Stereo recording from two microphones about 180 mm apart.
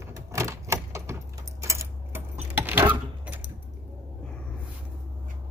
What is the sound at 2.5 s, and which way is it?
Keys jangling, 10° right (ahead or behind).